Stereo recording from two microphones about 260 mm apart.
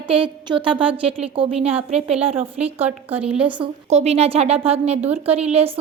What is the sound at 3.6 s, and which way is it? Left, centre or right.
A woman's voice, right.